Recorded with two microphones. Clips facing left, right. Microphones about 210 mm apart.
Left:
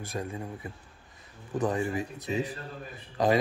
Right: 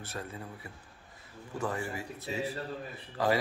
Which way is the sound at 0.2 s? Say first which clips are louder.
Left 6 dB; 20° left (ahead or behind).